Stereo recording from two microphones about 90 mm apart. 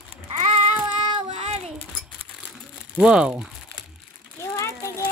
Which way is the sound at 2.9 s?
10° right (ahead or behind).